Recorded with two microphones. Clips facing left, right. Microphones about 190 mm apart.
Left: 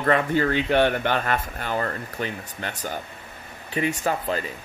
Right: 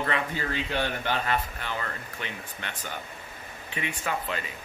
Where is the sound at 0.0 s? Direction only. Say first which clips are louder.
Left 9 dB; 55° left (ahead or behind).